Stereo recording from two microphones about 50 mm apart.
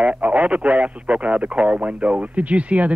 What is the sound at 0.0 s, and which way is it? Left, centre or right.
A man's voice, right.